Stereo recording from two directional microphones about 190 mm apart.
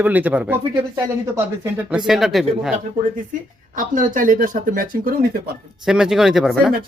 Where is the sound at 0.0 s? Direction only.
10° right (ahead or behind).